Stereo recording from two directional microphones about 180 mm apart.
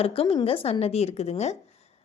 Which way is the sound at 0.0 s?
30° left (ahead or behind).